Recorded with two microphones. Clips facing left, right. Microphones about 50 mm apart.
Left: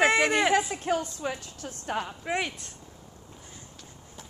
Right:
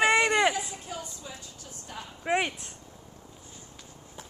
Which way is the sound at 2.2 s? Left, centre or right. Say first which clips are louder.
Right 7 dB; centre.